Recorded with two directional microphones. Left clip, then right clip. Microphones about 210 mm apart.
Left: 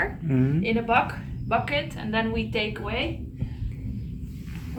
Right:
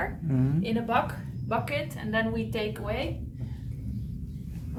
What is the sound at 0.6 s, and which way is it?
A woman's voice, 15° right (ahead or behind).